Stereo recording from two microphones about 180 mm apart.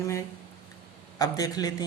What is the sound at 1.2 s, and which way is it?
Speech, 20° left (ahead or behind).